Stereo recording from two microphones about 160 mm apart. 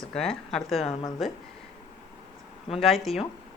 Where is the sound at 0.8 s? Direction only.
40° left (ahead or behind).